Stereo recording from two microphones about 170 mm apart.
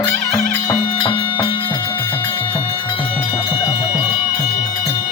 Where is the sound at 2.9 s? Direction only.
30° left (ahead or behind).